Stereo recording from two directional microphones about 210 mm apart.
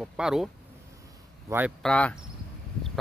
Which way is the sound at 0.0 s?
5° right (ahead or behind).